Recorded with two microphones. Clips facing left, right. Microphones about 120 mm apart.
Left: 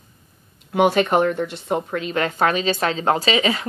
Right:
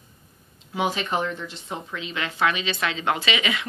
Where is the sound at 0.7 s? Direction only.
60° left (ahead or behind); by 3.6 s 35° left (ahead or behind).